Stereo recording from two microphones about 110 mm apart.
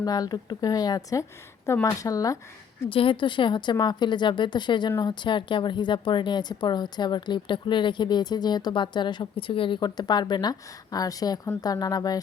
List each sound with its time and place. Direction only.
0.0 s speech: 35° left (ahead or behind)
2.9 s speech: 50° left (ahead or behind); by 12.2 s 35° left (ahead or behind)